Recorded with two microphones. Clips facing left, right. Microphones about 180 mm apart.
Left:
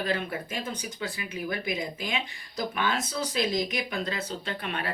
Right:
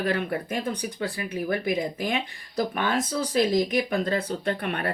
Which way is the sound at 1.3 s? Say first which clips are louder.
Right 6 dB; 50° right (ahead or behind).